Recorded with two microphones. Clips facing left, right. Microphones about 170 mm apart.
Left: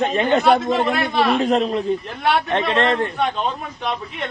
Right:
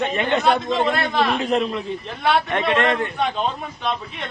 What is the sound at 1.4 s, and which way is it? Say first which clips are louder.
A man's voice: left 3 dB; 40° left (ahead or behind).